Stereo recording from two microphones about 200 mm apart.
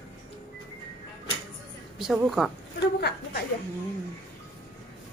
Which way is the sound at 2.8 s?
55° left (ahead or behind).